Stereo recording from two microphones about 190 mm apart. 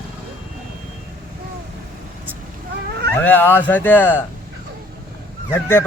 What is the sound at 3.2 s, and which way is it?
Speech, 10° left (ahead or behind).